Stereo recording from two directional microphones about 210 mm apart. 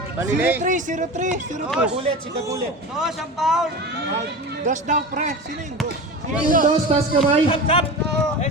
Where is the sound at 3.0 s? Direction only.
Centre (ahead or behind).